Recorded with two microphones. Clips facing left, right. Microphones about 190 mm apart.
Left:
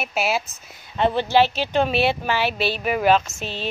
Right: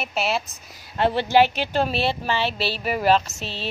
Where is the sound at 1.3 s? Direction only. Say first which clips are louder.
Even; 15° right (ahead or behind).